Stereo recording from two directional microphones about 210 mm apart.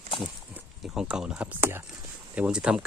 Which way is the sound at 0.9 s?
5° right (ahead or behind).